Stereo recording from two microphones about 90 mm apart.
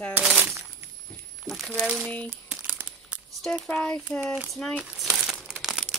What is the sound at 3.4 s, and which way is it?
Speech, 5° left (ahead or behind).